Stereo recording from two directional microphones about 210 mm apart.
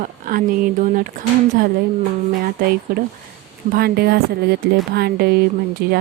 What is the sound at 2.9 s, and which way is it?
Speech, 45° right (ahead or behind).